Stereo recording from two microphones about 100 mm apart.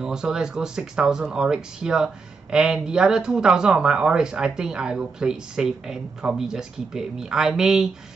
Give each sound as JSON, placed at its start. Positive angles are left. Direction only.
{"t": 0.0, "sound": "speech", "side_deg": -5}